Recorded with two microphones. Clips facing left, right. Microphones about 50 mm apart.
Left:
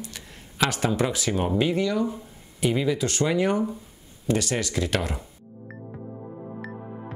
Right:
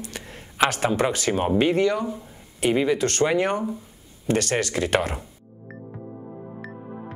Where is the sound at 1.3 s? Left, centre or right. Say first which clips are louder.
Right 4 dB; right.